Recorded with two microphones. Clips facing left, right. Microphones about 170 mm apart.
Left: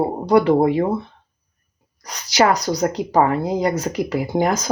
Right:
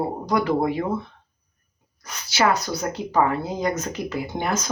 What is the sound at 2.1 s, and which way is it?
Speech, 35° left (ahead or behind).